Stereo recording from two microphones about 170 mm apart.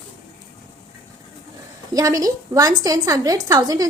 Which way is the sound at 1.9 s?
20° right (ahead or behind).